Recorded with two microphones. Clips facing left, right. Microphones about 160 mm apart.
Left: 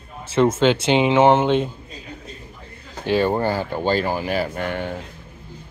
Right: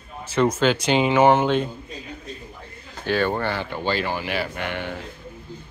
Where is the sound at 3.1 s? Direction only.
30° left (ahead or behind).